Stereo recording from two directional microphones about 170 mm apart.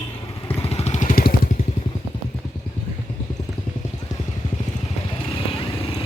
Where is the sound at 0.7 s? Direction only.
40° left (ahead or behind); by 1.4 s 55° left (ahead or behind).